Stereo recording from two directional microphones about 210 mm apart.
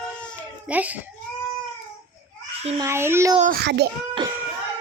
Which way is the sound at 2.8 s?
10° right (ahead or behind).